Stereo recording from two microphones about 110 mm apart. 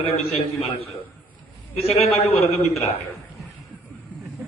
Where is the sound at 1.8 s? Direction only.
65° left (ahead or behind).